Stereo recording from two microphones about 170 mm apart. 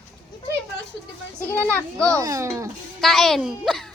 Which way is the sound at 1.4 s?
10° left (ahead or behind).